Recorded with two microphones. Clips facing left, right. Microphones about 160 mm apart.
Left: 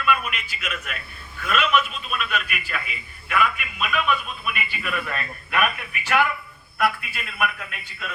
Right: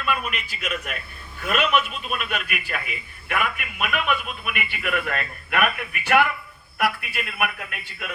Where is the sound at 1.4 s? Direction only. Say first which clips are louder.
Even; 45° right (ahead or behind).